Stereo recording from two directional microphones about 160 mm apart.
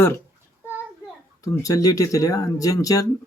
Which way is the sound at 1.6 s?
20° left (ahead or behind).